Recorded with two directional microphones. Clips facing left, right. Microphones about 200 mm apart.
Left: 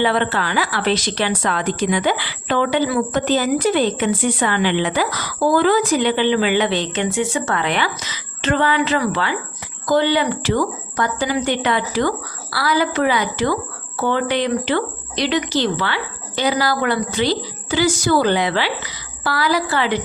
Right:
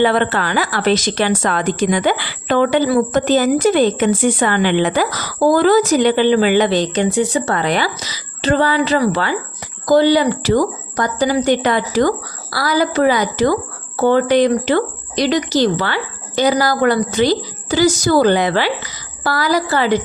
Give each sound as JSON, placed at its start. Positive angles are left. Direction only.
{"t": 0.0, "sound": "a woman's voice", "side_deg": -50}